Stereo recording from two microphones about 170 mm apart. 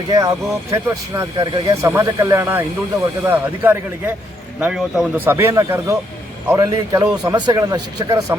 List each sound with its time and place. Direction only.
0.1 s a man's voice: 20° right (ahead or behind)